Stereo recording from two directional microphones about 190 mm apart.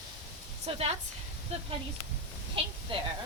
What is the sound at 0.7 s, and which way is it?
Speech, 30° right (ahead or behind).